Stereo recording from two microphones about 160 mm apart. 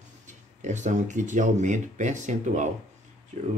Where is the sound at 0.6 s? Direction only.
50° right (ahead or behind).